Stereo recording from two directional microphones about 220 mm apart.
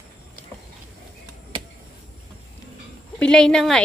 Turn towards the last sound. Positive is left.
turn(degrees=5)  # may be behind; listen again after turning